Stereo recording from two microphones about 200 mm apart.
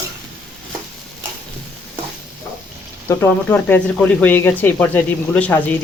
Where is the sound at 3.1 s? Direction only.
10° left (ahead or behind).